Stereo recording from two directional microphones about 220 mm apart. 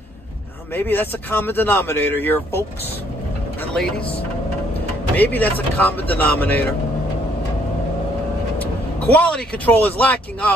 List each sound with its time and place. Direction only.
0.7 s speech: 10° left (ahead or behind)
3.7 s speech: 5° left (ahead or behind)
5.1 s speech: 5° left (ahead or behind)
9.1 s speech: 5° left (ahead or behind)